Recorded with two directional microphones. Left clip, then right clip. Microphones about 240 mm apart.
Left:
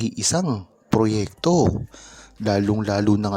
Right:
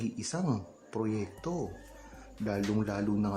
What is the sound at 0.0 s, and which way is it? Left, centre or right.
Speech, left.